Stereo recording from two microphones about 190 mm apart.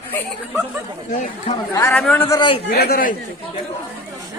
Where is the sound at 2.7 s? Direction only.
50° left (ahead or behind).